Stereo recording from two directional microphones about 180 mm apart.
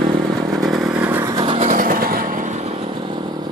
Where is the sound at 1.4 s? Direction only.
30° right (ahead or behind).